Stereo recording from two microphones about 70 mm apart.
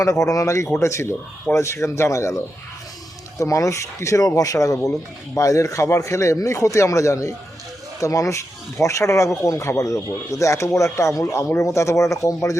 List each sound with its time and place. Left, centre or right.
0.0 s speech: left